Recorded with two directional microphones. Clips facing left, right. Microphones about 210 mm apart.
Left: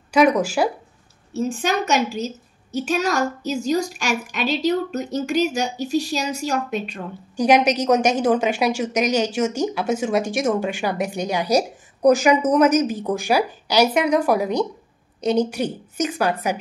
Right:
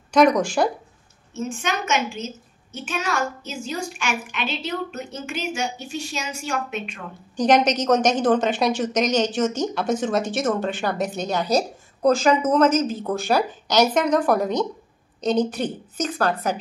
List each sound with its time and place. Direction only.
0.1 s a woman's voice: 5° left (ahead or behind)
1.3 s a woman's voice: 35° left (ahead or behind)
7.3 s a woman's voice: 10° left (ahead or behind)